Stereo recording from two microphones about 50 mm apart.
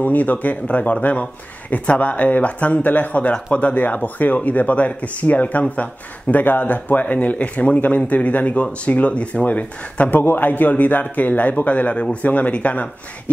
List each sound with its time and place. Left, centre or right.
0.0 s speech: left
10.2 s speech: left